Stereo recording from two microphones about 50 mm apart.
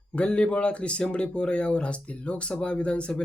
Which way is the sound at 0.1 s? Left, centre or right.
Left.